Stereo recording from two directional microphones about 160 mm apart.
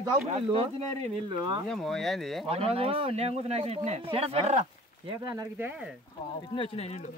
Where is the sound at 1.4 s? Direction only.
25° right (ahead or behind).